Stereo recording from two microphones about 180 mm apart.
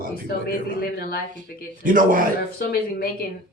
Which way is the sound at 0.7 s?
60° left (ahead or behind).